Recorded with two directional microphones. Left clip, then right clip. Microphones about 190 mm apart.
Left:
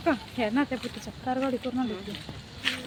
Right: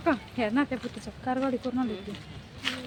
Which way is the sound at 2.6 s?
Centre (ahead or behind).